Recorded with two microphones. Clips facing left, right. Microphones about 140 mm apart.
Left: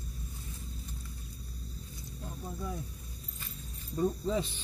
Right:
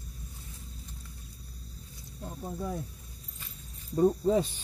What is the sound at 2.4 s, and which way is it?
Speech, 45° right (ahead or behind).